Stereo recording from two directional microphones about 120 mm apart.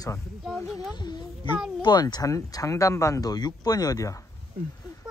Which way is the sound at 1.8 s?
35° left (ahead or behind).